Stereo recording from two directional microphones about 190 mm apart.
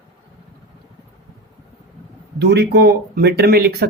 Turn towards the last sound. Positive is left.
turn(degrees=-55)  # may be behind; listen again after turning